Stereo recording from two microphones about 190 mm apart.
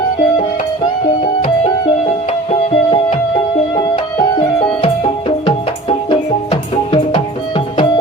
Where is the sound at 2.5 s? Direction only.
30° left (ahead or behind).